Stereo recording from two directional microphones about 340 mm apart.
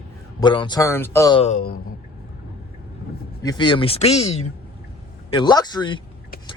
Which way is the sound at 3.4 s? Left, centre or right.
Centre.